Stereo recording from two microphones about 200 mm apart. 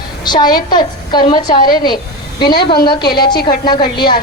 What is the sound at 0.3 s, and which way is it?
A woman's voice, 20° left (ahead or behind).